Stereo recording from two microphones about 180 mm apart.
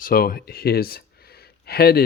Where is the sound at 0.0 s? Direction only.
55° left (ahead or behind).